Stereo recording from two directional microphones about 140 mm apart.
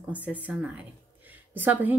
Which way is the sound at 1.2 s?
10° right (ahead or behind).